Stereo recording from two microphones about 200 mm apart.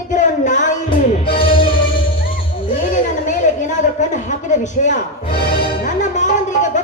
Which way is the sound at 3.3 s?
40° left (ahead or behind).